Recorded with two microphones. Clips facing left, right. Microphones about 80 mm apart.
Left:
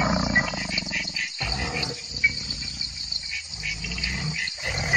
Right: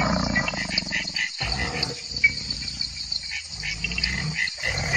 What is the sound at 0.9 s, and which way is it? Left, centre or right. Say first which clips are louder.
Wild animals: right 2 dB; right.